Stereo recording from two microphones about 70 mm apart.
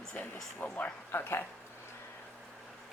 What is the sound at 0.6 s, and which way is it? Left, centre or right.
Speech, centre.